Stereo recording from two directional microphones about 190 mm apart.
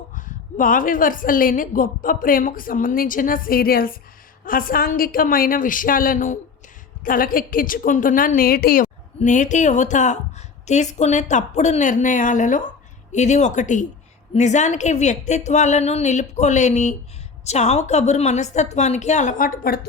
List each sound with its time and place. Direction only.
0.1 s a woman's voice: 45° left (ahead or behind)